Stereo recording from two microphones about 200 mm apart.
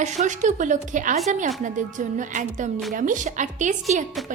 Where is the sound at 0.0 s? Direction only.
35° right (ahead or behind).